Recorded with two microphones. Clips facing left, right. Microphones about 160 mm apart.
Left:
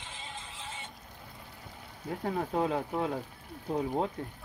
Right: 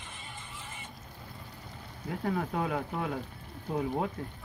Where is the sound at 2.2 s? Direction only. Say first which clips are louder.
Left 1 dB; 25° left (ahead or behind).